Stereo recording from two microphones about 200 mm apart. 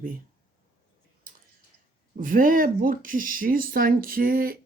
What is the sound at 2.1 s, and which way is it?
Speech, 45° right (ahead or behind).